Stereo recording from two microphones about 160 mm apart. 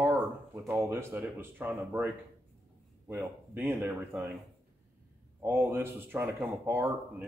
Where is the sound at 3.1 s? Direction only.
10° right (ahead or behind).